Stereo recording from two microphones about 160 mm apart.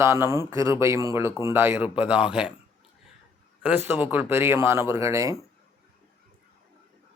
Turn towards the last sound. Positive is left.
turn(degrees=-20)  # may be behind; listen again after turning